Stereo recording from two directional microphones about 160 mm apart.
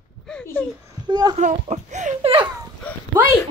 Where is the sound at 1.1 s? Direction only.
25° right (ahead or behind).